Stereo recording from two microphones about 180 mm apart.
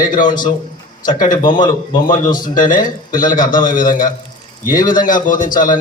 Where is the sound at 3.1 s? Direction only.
50° left (ahead or behind).